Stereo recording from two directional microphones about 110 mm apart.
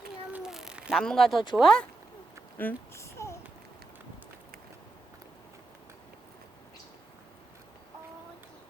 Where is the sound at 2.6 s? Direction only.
20° left (ahead or behind).